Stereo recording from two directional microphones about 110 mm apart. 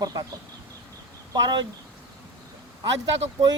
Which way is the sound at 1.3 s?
40° right (ahead or behind).